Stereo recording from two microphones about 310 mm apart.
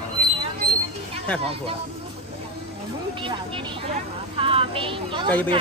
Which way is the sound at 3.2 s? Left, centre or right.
Centre.